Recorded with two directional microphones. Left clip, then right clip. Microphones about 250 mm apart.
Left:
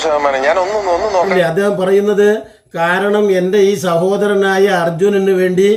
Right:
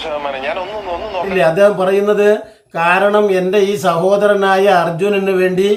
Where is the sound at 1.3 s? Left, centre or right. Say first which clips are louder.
Right 2 dB; centre.